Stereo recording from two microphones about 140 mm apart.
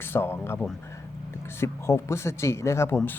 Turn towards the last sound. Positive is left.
turn(degrees=15)  # may be behind; listen again after turning